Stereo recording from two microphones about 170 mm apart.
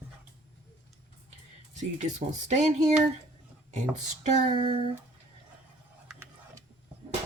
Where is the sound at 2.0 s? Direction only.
45° right (ahead or behind).